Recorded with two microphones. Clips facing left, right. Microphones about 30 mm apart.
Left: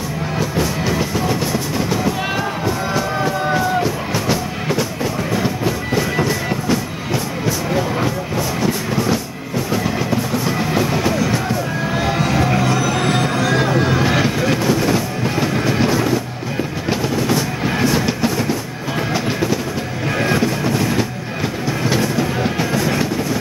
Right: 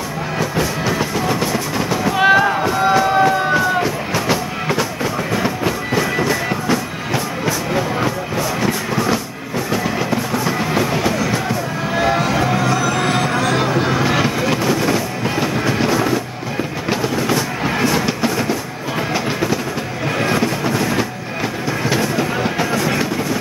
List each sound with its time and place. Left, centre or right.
0.4 s train: centre
2.1 s music: right
5.9 s music: centre
13.4 s vehicle: centre
16.9 s train: centre
20.2 s music: centre